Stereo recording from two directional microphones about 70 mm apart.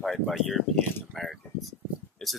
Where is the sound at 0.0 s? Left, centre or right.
Centre.